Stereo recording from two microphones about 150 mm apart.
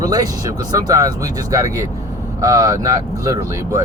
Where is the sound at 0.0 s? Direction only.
25° right (ahead or behind).